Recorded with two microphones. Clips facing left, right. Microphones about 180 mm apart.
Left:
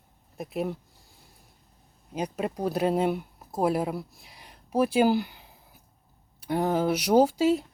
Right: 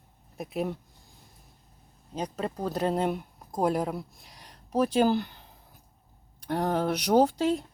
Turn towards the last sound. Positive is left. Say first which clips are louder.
# left 2 dB
turn(degrees=5)  # may be behind; listen again after turning